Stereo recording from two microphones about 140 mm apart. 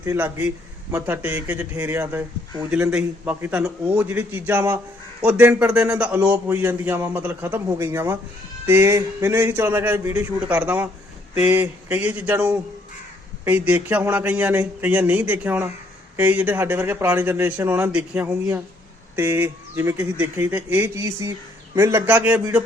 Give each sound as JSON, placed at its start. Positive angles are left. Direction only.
{"t": 0.0, "sound": "speech", "side_deg": -15}